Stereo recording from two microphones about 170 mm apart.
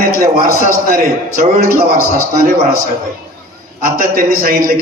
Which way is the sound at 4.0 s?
55° right (ahead or behind).